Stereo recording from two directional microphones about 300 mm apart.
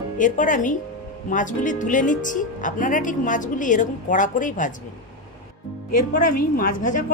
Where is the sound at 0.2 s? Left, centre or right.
Left.